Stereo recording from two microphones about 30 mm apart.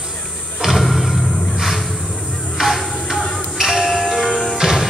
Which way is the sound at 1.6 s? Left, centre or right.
Centre.